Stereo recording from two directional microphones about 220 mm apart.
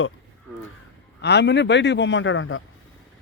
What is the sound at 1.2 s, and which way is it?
Speech, 50° left (ahead or behind).